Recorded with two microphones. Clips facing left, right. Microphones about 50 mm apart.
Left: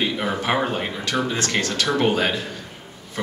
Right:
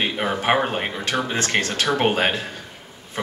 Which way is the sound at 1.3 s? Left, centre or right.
Right.